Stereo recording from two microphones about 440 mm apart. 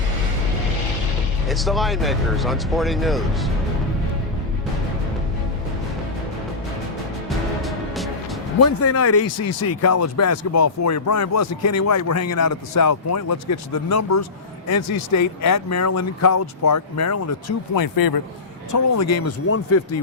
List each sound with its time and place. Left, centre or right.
1.5 s speech: centre
7.3 s music: centre
8.5 s speech: left
17.7 s speech: left
18.7 s speech: left